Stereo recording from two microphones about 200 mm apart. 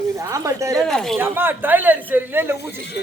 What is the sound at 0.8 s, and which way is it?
Speech, centre (ahead or behind).